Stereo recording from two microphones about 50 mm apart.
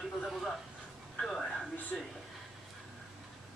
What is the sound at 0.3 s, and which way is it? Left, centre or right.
Speech, centre.